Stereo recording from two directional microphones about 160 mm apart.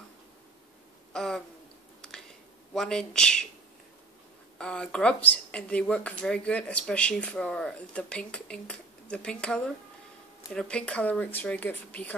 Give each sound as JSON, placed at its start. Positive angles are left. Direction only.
{"t": 1.1, "sound": "speech", "side_deg": 5}
{"t": 2.0, "sound": "a sound", "side_deg": 5}
{"t": 2.7, "sound": "speech", "side_deg": 5}
{"t": 4.6, "sound": "speech", "side_deg": 5}